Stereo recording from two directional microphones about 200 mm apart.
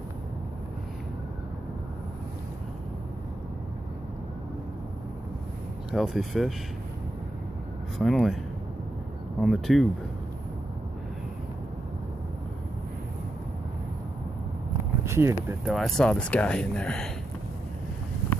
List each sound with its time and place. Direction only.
5.9 s speech: centre (ahead or behind)
8.0 s speech: centre (ahead or behind)
9.4 s speech: centre (ahead or behind)
15.0 s speech: 15° right (ahead or behind)
15.7 s speech: centre (ahead or behind)